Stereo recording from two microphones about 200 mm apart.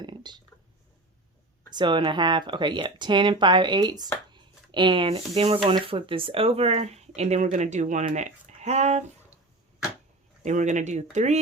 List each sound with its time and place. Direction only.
0.0 s a sound: 20° right (ahead or behind)
1.7 s speech: 20° right (ahead or behind)
10.4 s speech: 35° right (ahead or behind)